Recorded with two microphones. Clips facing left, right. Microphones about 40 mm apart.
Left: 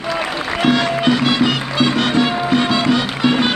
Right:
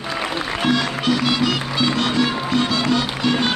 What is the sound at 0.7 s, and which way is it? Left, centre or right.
Music, left.